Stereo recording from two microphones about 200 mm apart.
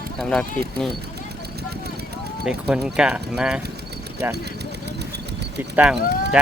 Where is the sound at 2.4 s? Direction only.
5° right (ahead or behind).